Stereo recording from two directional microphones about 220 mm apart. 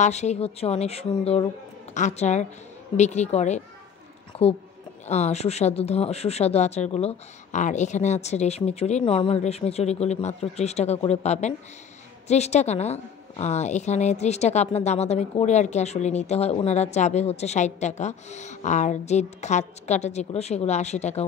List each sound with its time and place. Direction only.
0.0 s a woman's voice: 30° left (ahead or behind)
4.3 s a sound: 25° left (ahead or behind)
5.0 s a woman's voice: 30° left (ahead or behind)